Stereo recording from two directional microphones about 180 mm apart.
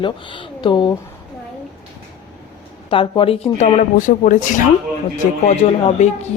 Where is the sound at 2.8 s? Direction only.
30° left (ahead or behind).